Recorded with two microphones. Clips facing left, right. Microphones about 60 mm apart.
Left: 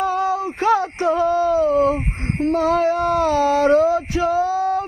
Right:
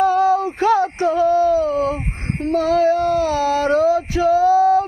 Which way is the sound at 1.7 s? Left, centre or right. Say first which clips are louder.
Left 3 dB; left.